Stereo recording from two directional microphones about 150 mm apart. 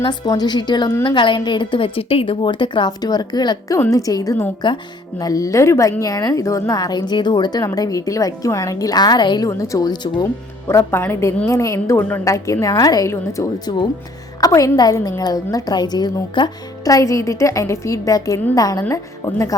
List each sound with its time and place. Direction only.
0.0 s a woman's voice: 30° left (ahead or behind)
10.7 s a woman's voice: 15° left (ahead or behind)